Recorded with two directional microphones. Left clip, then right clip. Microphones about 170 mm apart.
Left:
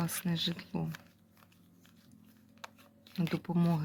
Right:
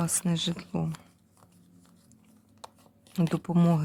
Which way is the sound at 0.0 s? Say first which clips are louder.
Right 5 dB; 30° right (ahead or behind).